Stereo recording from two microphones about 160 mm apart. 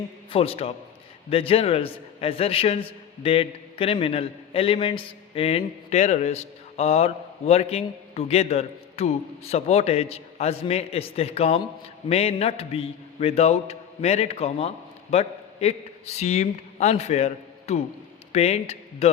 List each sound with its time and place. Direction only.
0.3 s a man's voice: 35° left (ahead or behind)